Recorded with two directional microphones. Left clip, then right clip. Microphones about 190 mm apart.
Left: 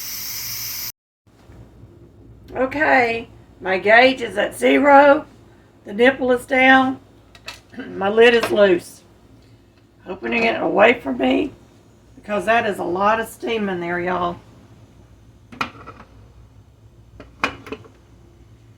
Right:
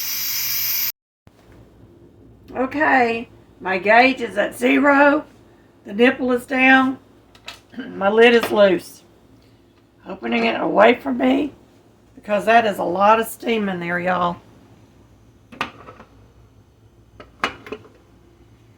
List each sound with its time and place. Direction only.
0.0 s a sound: 5° left (ahead or behind)
2.5 s a woman's voice: 20° right (ahead or behind)
10.1 s a woman's voice: 25° right (ahead or behind)
13.4 s a woman's voice: 60° right (ahead or behind)